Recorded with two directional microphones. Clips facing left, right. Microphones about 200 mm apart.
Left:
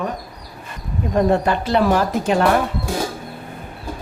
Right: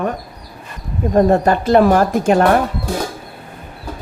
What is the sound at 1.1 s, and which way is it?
Speech, 45° right (ahead or behind).